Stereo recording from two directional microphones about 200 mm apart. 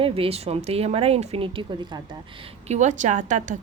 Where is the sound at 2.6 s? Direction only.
35° right (ahead or behind).